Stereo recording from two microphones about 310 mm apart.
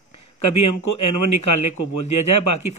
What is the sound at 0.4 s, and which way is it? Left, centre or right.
A man's voice, left.